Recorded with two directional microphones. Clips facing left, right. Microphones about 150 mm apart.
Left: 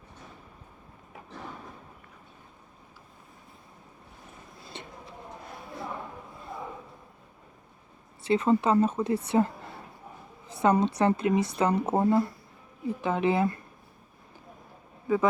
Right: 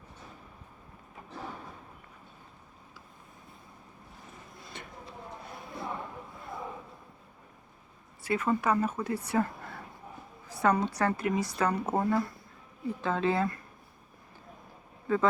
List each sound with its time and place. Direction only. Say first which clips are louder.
8.2 s a woman's voice: left 5 dB; 25° left (ahead or behind)
10.5 s a woman's voice: left 3 dB; 20° left (ahead or behind)
15.0 s a man's voice: left 2 dB; 15° left (ahead or behind)